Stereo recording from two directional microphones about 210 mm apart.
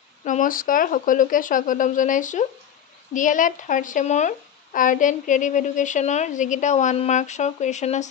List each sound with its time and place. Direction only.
0.2 s speech: 40° left (ahead or behind)